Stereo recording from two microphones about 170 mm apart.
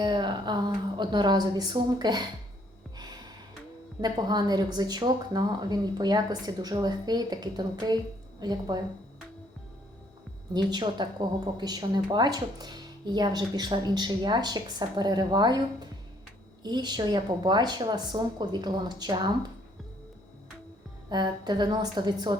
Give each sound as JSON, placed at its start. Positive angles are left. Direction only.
{"t": 0.0, "sound": "a woman's voice", "side_deg": -25}
{"t": 4.0, "sound": "a woman's voice", "side_deg": -25}
{"t": 10.7, "sound": "a woman's voice", "side_deg": -25}
{"t": 21.1, "sound": "a woman's voice", "side_deg": -25}